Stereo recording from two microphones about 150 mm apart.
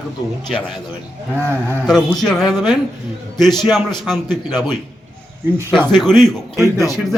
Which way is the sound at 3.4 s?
30° left (ahead or behind).